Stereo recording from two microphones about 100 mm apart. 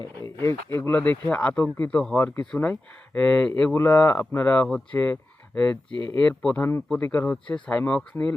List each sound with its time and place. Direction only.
0.3 s speech: 25° left (ahead or behind)
5.9 s speech: 55° right (ahead or behind)
6.1 s speech: 15° left (ahead or behind)